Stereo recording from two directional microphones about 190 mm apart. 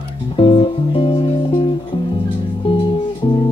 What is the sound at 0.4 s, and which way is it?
Music, 25° left (ahead or behind).